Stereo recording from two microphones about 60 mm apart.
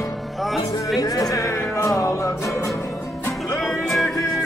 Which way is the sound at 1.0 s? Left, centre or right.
Left.